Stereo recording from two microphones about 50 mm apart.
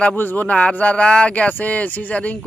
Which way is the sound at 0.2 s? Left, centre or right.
Left.